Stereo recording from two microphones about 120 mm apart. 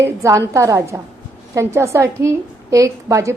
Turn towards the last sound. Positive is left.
turn(degrees=-25)  # may be behind; listen again after turning